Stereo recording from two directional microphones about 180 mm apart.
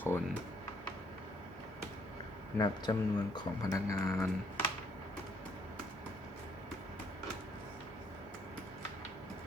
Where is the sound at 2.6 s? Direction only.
25° left (ahead or behind).